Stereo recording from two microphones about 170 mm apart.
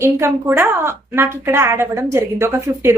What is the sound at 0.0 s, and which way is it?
A woman's voice, 15° right (ahead or behind).